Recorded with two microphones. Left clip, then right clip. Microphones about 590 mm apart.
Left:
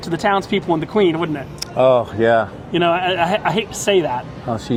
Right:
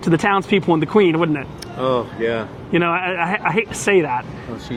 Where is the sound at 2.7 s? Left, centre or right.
Right.